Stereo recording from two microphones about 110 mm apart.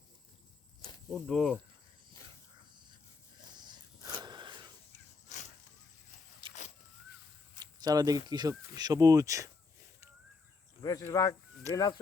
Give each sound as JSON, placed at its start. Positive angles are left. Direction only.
{"t": 1.3, "sound": "speech", "side_deg": 0}
{"t": 2.6, "sound": "a sound", "side_deg": -45}
{"t": 5.3, "sound": "a sound", "side_deg": 90}
{"t": 6.4, "sound": "vehicle", "side_deg": -50}
{"t": 7.6, "sound": "speech", "side_deg": -35}
{"t": 10.8, "sound": "speech", "side_deg": 30}